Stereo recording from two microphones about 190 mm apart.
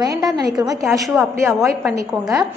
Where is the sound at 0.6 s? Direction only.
20° right (ahead or behind).